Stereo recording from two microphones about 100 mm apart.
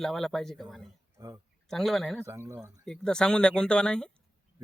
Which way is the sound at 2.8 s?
5° left (ahead or behind).